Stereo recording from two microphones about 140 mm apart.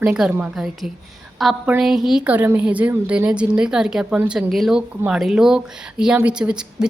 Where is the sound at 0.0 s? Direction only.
10° right (ahead or behind).